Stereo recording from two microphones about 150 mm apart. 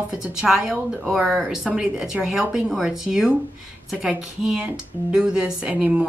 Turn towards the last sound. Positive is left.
turn(degrees=-10)  # may be behind; listen again after turning